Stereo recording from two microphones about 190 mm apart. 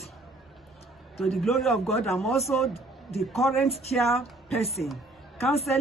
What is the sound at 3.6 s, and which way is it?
Speech, 35° left (ahead or behind).